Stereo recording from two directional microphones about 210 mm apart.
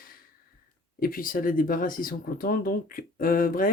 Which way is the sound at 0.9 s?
45° left (ahead or behind).